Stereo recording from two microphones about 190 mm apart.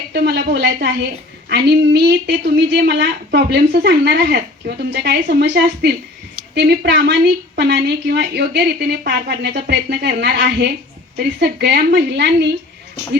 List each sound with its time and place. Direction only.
0.1 s a woman's voice: 55° right (ahead or behind)